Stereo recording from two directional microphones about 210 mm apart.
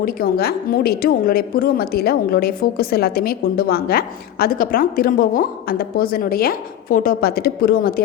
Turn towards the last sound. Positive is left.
turn(degrees=45)  # may be behind; listen again after turning